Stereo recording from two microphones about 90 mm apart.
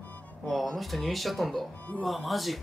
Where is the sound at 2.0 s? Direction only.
Centre (ahead or behind).